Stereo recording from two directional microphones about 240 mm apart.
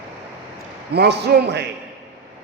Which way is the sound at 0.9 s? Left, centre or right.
Right.